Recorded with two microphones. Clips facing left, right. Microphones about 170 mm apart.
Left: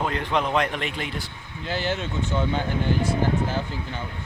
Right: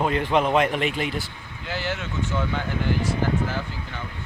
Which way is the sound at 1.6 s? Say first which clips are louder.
Left 3 dB; 25° left (ahead or behind).